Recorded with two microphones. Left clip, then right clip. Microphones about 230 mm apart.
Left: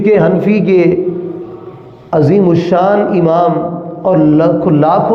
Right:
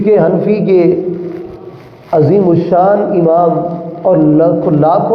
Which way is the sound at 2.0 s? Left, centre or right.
Left.